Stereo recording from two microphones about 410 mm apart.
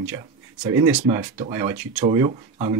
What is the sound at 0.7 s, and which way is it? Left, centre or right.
Speech, centre.